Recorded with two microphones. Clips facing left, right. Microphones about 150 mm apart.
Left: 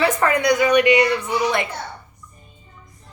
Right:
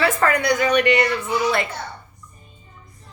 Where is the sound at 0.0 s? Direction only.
15° left (ahead or behind).